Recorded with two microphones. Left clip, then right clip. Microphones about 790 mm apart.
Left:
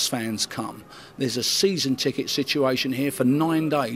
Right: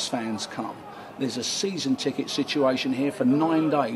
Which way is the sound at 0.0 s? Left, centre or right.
Left.